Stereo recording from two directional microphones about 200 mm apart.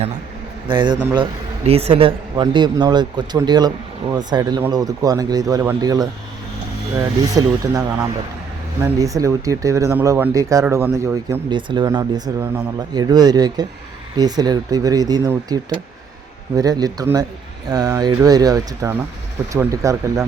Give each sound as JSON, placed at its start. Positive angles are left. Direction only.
{"t": 0.7, "sound": "speech", "side_deg": -25}
{"t": 7.2, "sound": "speech", "side_deg": -15}